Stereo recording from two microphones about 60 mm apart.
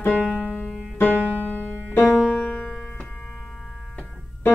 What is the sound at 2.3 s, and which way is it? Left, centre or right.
Music, centre.